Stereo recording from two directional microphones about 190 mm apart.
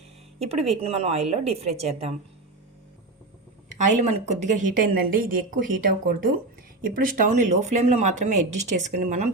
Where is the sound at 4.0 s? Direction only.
40° right (ahead or behind).